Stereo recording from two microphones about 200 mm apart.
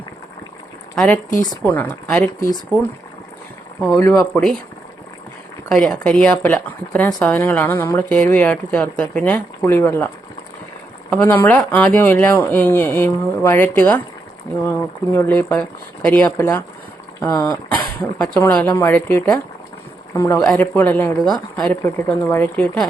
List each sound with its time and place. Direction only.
0.9 s speech: 5° left (ahead or behind)
3.8 s speech: 10° left (ahead or behind)
5.7 s speech: 5° left (ahead or behind)
11.1 s speech: 10° left (ahead or behind)
18.2 s speech: 5° left (ahead or behind)